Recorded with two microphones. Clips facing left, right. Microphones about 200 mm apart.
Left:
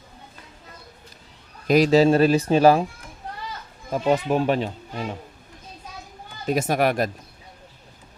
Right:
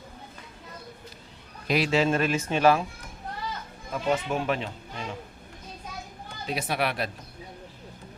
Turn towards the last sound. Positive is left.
turn(degrees=45)  # may be behind; listen again after turning